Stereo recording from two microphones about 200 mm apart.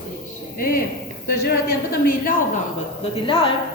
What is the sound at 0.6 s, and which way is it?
A woman's voice, 45° left (ahead or behind).